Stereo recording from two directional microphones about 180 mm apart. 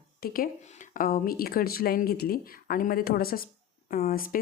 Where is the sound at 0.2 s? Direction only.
60° left (ahead or behind).